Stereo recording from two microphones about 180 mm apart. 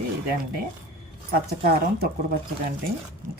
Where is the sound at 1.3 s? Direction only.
60° right (ahead or behind).